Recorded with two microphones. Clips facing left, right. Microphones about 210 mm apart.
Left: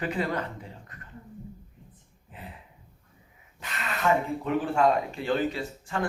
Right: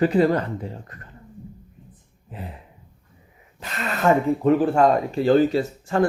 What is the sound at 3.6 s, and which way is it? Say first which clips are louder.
Speech: right 6 dB; 40° right (ahead or behind).